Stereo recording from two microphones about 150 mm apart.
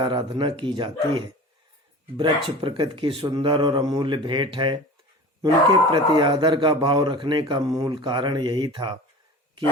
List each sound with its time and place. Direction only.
0.0 s speech: 30° right (ahead or behind)
5.9 s speech: 35° right (ahead or behind)